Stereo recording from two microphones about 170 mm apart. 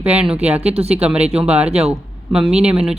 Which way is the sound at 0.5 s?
35° right (ahead or behind).